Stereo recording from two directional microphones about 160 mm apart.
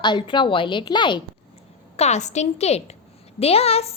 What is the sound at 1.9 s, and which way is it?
A woman's voice, 45° left (ahead or behind).